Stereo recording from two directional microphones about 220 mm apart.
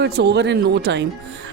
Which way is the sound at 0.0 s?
50° right (ahead or behind).